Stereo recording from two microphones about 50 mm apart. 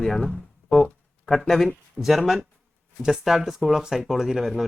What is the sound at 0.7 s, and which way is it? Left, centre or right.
Music, centre.